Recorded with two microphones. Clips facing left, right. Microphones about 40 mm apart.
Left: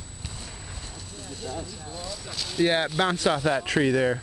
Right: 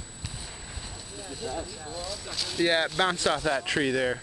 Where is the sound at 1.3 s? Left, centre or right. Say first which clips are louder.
Right 1 dB; centre.